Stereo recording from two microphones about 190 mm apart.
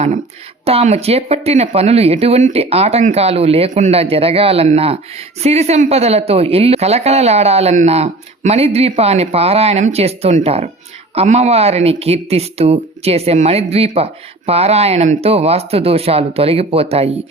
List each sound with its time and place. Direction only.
0.6 s speech: 30° right (ahead or behind)